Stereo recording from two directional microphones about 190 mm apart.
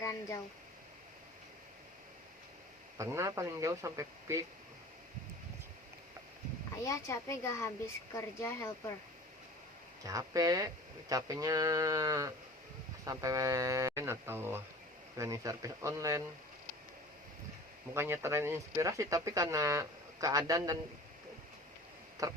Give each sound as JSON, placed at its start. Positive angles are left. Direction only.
{"t": 0.0, "sound": "speech", "side_deg": 15}
{"t": 3.0, "sound": "speech", "side_deg": -15}
{"t": 6.8, "sound": "a woman's voice", "side_deg": 15}
{"t": 10.0, "sound": "speech", "side_deg": -20}
{"t": 17.9, "sound": "speech", "side_deg": -15}
{"t": 22.2, "sound": "speech", "side_deg": -20}